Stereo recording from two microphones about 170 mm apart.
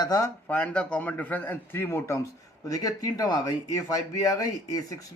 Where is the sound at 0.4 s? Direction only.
10° left (ahead or behind).